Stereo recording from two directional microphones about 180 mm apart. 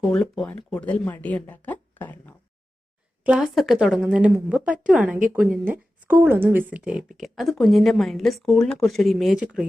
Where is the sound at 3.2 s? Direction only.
5° right (ahead or behind).